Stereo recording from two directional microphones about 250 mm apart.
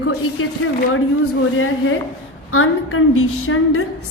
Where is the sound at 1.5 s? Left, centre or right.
Left.